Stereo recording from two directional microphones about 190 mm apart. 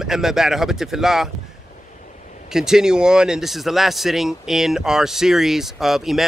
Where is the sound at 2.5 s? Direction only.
5° right (ahead or behind).